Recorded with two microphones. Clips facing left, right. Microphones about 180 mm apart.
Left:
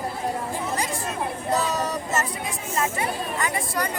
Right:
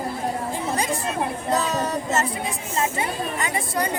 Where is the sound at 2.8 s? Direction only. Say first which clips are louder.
Right 1 dB; 25° right (ahead or behind).